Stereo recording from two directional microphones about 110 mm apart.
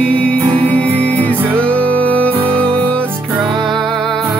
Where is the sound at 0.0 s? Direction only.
10° left (ahead or behind).